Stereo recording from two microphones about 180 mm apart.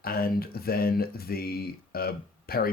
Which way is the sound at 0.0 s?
55° left (ahead or behind).